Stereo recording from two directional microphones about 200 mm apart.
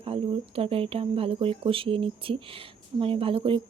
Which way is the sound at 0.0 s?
30° right (ahead or behind).